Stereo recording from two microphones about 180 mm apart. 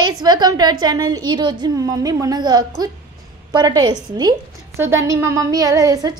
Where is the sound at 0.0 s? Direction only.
25° right (ahead or behind).